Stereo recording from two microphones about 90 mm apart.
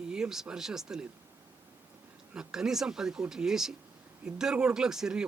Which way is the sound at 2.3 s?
10° right (ahead or behind).